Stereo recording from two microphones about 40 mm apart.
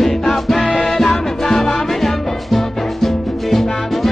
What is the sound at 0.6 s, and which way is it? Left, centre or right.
Music, left.